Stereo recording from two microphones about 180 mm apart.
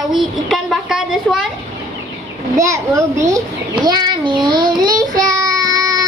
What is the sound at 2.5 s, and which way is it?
Speech, 15° right (ahead or behind).